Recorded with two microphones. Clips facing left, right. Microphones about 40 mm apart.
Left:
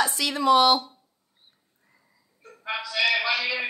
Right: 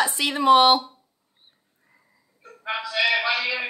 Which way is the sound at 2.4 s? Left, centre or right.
Centre.